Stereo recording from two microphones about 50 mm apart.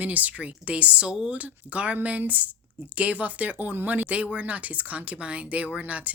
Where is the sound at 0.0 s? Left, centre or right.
Right.